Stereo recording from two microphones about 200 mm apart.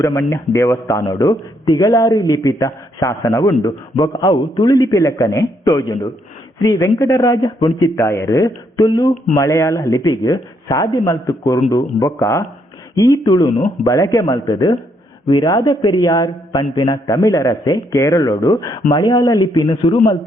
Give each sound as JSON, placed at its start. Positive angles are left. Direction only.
{"t": 0.0, "sound": "a man's voice", "side_deg": 15}